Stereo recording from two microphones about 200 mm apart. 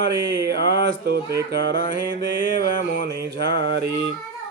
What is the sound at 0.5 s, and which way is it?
A man's voice, 60° right (ahead or behind).